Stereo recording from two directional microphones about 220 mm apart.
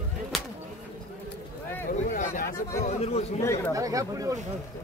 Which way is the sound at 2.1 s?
35° left (ahead or behind).